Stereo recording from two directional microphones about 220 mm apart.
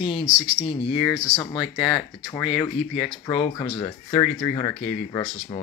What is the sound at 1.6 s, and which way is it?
Speech, centre (ahead or behind).